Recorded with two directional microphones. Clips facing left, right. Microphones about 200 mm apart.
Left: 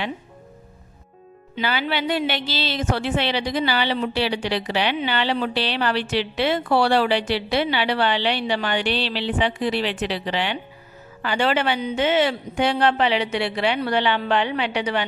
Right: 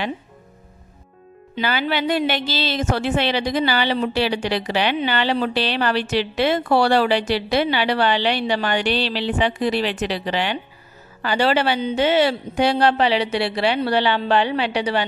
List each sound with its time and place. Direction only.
1.5 s a woman's voice: 45° right (ahead or behind)